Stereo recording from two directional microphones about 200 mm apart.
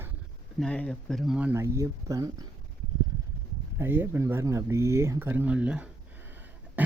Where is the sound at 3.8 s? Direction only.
10° right (ahead or behind).